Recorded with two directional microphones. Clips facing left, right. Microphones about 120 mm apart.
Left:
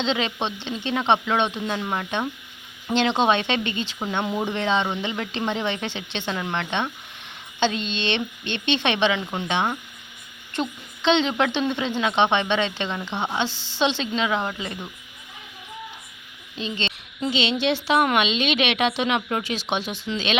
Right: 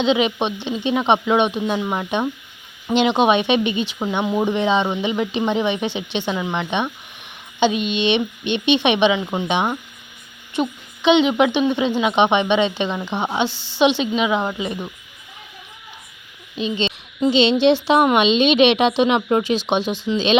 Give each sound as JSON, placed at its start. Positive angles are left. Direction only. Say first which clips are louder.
{"t": 0.0, "sound": "speech", "louder": "right 7 dB", "side_deg": -15}
{"t": 16.6, "sound": "speech", "louder": "right 7 dB", "side_deg": -15}